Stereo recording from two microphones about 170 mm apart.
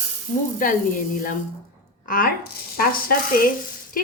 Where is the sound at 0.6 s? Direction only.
50° left (ahead or behind).